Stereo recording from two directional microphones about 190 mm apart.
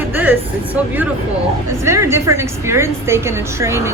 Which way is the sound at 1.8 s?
15° right (ahead or behind).